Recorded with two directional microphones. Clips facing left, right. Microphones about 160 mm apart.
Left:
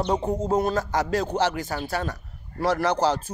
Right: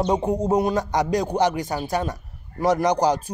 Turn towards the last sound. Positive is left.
turn(degrees=-15)  # may be behind; listen again after turning